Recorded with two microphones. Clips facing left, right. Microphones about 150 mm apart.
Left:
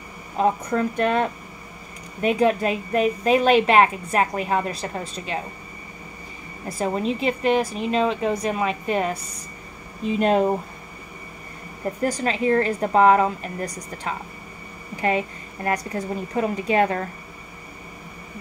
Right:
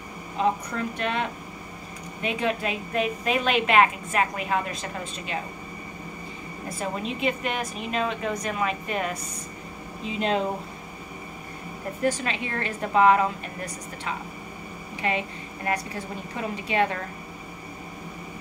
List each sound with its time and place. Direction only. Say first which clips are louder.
0.4 s speech: left 5 dB; 45° left (ahead or behind)
2.2 s a woman's voice: left 7 dB; 40° left (ahead or behind)
6.7 s a woman's voice: left 7 dB; 35° left (ahead or behind)
10.1 s speech: left 6 dB; 50° left (ahead or behind)
12.0 s a woman's voice: left 3 dB; 40° left (ahead or behind)